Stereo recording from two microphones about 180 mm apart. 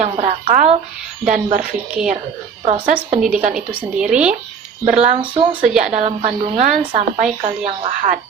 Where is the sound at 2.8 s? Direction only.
50° right (ahead or behind).